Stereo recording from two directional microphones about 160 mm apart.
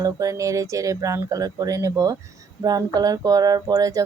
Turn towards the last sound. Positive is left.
turn(degrees=-20)  # may be behind; listen again after turning